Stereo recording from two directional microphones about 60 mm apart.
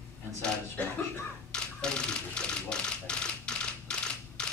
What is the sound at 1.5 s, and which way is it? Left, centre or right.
Typewriter, centre.